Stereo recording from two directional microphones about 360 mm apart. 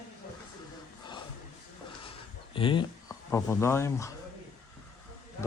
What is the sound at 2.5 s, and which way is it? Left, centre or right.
Speech, centre.